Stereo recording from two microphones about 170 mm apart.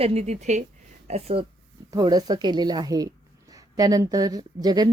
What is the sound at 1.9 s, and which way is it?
Speech, 25° right (ahead or behind).